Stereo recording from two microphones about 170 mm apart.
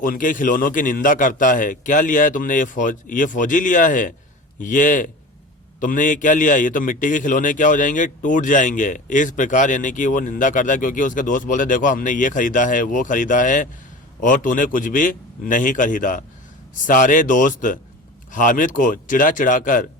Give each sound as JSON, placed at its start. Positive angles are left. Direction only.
{"t": 0.0, "sound": "a man's voice", "side_deg": 55}